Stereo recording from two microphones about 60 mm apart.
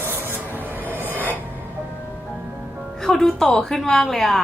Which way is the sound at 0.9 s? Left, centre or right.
Right.